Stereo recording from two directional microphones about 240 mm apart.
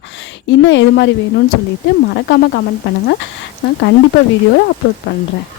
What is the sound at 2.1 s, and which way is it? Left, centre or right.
Speech, left.